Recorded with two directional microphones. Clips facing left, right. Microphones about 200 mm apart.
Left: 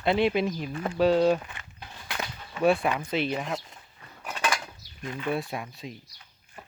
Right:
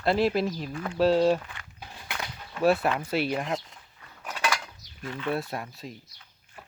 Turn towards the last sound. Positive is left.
turn(degrees=0)  # may be behind; listen again after turning